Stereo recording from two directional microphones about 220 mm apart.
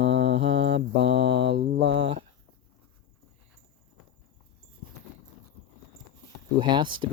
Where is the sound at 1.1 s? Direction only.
50° right (ahead or behind).